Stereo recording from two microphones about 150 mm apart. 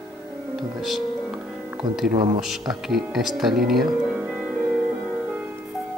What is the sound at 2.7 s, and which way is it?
Speech, centre (ahead or behind).